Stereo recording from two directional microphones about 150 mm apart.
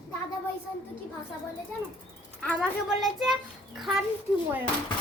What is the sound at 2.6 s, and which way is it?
Speech, 5° right (ahead or behind).